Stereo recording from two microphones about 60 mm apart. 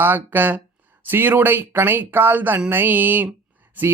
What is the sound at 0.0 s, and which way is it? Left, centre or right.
Speech, right.